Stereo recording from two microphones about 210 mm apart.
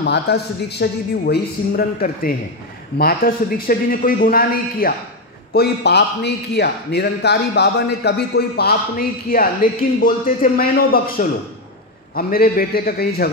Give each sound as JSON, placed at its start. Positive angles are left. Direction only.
{"t": 0.0, "sound": "a man's voice", "side_deg": 50}